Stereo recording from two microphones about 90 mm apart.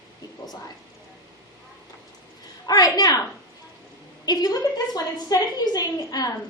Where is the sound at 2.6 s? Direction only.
45° left (ahead or behind).